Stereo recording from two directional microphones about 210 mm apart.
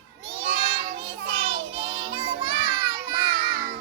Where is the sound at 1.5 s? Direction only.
25° right (ahead or behind).